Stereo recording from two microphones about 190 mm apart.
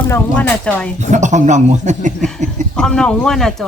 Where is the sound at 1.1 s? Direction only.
40° right (ahead or behind).